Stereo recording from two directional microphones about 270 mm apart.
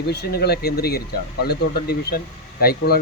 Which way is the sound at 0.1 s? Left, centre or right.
Left.